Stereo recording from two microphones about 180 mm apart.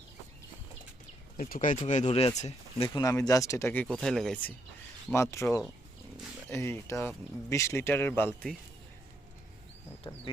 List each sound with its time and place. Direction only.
1.4 s speech: 50° left (ahead or behind)
2.9 s speech: 20° left (ahead or behind)
6.5 s speech: 15° left (ahead or behind)